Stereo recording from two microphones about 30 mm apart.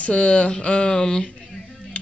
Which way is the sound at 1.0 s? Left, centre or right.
Left.